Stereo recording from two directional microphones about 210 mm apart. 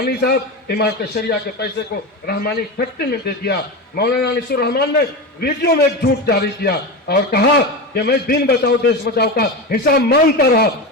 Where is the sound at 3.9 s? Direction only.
50° left (ahead or behind).